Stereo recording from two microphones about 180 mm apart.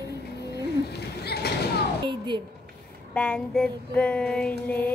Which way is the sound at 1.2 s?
65° left (ahead or behind).